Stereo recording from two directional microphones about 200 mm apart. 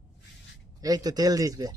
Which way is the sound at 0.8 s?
20° right (ahead or behind).